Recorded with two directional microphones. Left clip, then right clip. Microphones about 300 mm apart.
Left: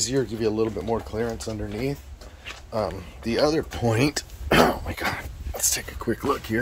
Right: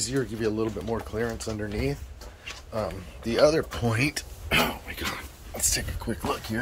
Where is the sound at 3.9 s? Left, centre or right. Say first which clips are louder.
Left 4 dB; centre.